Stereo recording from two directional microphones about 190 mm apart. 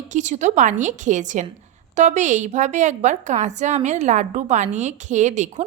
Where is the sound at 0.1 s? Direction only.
40° right (ahead or behind).